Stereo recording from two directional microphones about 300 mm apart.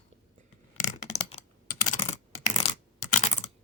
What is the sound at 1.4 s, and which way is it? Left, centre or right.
Computer keyboard, centre.